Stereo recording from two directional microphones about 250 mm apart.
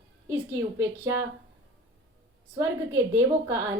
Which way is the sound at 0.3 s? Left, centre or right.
Centre.